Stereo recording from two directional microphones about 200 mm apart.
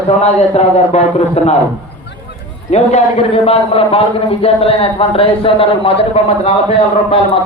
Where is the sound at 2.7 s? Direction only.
35° left (ahead or behind).